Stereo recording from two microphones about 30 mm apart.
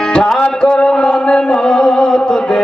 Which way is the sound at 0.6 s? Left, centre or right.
Left.